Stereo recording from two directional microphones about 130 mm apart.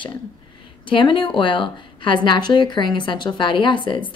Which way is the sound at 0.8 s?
40° left (ahead or behind).